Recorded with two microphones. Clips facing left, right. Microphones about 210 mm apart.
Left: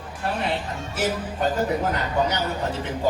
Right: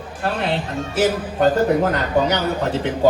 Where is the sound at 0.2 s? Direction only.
75° right (ahead or behind).